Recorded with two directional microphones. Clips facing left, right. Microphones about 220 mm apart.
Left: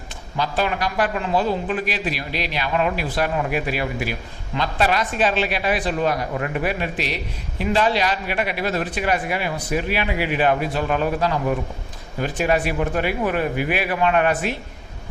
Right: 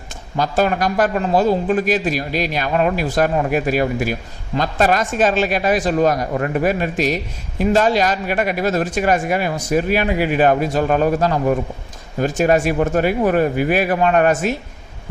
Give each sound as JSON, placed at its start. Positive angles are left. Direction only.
{"t": 0.3, "sound": "a man's voice", "side_deg": -45}